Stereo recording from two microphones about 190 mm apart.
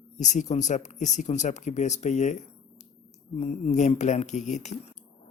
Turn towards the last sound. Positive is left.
turn(degrees=35)  # may be behind; listen again after turning